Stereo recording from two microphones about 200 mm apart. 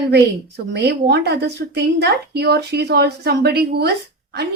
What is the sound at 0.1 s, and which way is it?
A woman's voice, 55° right (ahead or behind).